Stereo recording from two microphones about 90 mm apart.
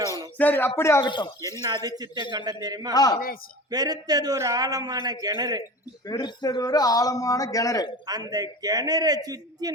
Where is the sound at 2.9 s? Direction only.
45° left (ahead or behind).